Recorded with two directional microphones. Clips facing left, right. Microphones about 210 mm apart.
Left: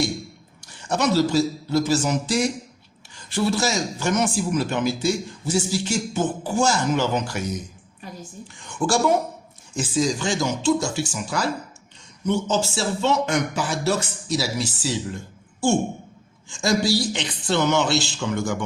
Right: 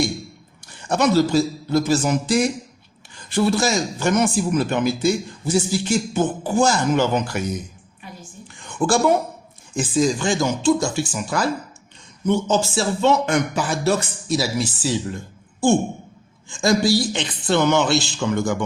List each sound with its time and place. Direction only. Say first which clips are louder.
0.6 s a man's voice: right 3 dB; 55° right (ahead or behind)
8.0 s a sound: left 2 dB; 40° left (ahead or behind)
8.6 s speech: right 3 dB; 55° right (ahead or behind)
16.5 s speech: right 3 dB; 55° right (ahead or behind)